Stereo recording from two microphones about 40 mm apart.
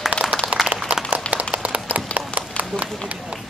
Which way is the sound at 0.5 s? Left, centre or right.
Right.